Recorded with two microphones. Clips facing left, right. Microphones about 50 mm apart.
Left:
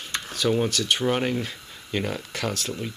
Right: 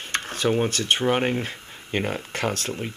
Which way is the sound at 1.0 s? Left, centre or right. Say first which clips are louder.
Right 3 dB; right.